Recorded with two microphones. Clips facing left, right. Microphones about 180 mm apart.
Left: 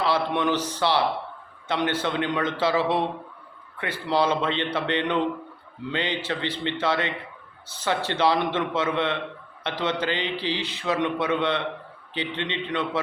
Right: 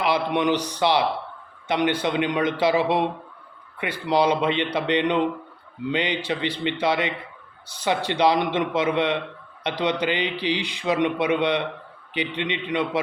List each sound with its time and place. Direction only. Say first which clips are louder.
0.0 s a man's voice: right 2 dB; 15° right (ahead or behind)